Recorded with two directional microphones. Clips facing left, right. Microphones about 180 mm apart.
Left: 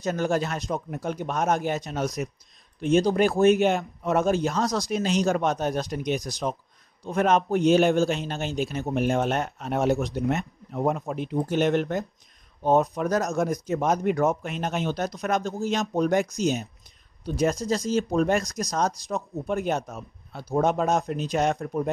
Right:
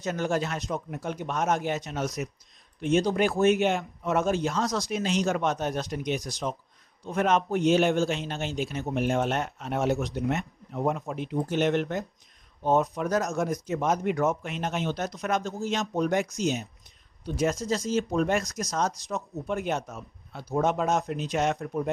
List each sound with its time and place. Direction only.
0.0 s a man's voice: 40° left (ahead or behind)